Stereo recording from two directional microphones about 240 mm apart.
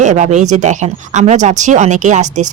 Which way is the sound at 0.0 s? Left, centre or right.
Right.